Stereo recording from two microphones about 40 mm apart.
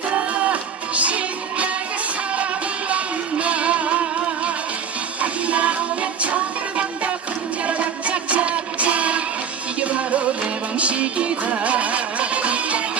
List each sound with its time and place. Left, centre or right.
0.2 s music: right
2.9 s music: right